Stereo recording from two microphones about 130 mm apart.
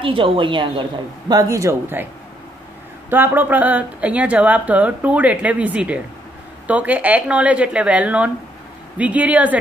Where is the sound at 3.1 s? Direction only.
15° right (ahead or behind).